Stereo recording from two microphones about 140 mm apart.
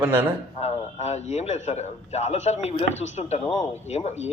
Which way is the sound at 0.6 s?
50° left (ahead or behind).